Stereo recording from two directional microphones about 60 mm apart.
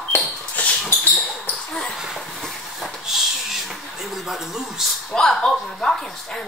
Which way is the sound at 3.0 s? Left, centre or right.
Centre.